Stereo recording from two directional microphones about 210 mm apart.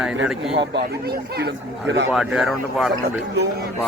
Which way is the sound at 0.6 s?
55° right (ahead or behind).